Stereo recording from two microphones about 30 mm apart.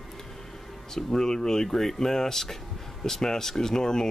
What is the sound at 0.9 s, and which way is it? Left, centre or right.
Speech, centre.